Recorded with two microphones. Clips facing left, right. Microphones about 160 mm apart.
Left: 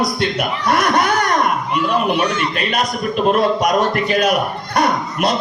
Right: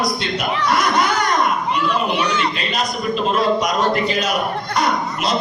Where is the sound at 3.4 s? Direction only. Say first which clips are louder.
Left 2 dB; 55° left (ahead or behind).